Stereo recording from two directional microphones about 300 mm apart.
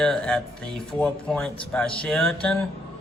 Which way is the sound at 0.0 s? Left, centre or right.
Centre.